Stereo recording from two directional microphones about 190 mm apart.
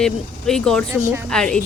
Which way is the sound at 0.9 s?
15° right (ahead or behind).